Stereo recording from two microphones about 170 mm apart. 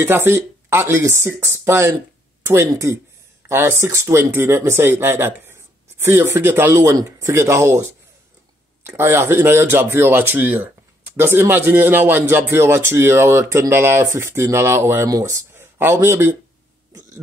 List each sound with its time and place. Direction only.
0.0 s speech: 15° right (ahead or behind)